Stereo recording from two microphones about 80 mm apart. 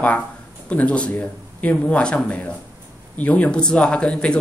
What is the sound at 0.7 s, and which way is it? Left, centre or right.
Speech, centre.